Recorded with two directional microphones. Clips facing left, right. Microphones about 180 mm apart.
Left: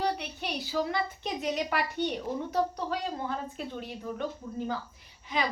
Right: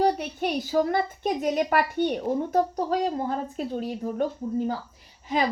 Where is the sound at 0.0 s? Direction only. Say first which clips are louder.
Right 8 dB; 45° right (ahead or behind).